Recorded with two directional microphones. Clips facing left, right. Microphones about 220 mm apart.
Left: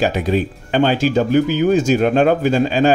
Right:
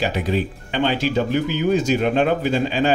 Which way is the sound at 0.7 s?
45° left (ahead or behind).